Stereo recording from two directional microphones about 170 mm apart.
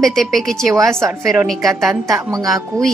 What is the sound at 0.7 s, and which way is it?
Speech, 15° right (ahead or behind).